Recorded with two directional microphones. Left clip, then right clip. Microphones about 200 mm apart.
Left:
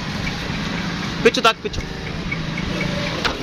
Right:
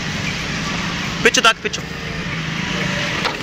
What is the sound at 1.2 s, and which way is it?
Speech, 5° right (ahead or behind).